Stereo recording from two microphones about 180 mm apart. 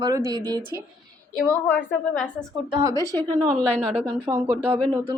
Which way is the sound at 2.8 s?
20° right (ahead or behind).